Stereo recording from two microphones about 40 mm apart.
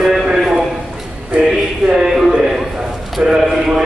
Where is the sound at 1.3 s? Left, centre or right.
Right.